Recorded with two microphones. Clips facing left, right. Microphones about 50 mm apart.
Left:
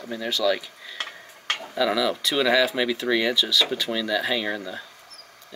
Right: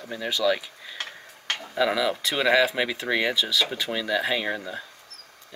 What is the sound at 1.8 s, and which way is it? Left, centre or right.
Speech, centre.